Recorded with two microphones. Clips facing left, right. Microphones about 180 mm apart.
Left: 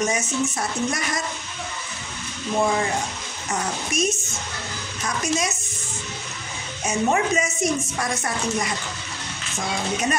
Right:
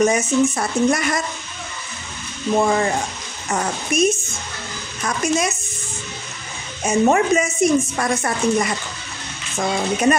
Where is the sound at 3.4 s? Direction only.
55° right (ahead or behind).